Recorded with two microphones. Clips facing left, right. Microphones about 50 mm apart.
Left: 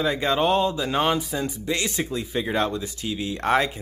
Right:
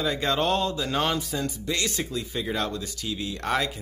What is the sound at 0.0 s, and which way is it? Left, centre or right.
Speech, centre.